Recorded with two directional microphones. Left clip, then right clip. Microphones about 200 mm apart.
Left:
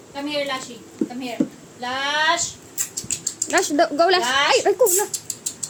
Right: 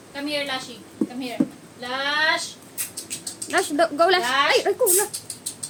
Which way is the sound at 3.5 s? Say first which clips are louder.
Left 2 dB; 25° left (ahead or behind).